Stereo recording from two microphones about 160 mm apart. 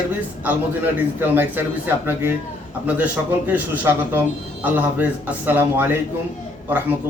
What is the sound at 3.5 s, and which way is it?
A man's voice, 10° right (ahead or behind).